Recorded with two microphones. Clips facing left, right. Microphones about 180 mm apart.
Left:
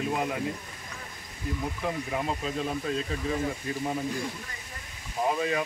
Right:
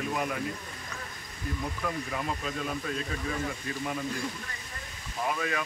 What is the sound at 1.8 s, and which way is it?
Speech, 20° left (ahead or behind).